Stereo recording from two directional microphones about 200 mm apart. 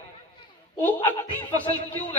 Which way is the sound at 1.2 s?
25° left (ahead or behind).